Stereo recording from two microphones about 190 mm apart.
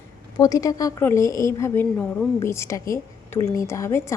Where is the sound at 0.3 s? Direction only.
20° left (ahead or behind).